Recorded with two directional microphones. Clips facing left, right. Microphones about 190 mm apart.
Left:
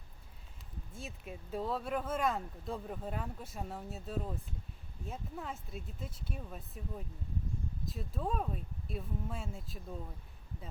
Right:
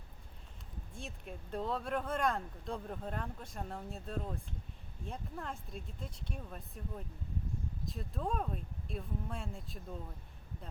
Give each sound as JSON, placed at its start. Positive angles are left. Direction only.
{"t": 0.9, "sound": "speech", "side_deg": 5}